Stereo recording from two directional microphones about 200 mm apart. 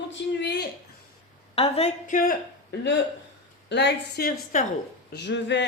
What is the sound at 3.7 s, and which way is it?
A woman's voice, 60° left (ahead or behind).